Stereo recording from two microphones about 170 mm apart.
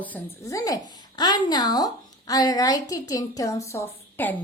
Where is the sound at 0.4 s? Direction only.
20° left (ahead or behind).